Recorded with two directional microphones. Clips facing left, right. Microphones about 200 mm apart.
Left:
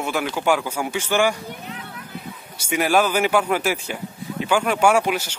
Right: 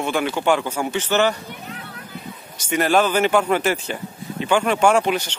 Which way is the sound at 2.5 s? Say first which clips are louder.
Right 1 dB; 10° left (ahead or behind).